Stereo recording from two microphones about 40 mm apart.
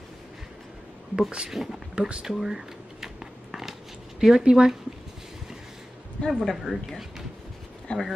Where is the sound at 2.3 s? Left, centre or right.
Centre.